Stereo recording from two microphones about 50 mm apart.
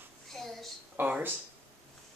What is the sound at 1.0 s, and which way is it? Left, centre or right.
Speech, right.